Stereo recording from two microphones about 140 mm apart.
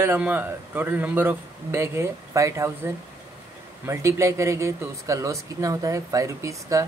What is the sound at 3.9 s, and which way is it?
Speech, 20° right (ahead or behind).